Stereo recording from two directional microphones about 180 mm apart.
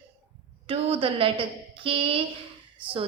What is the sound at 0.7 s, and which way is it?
A woman's voice, 30° right (ahead or behind).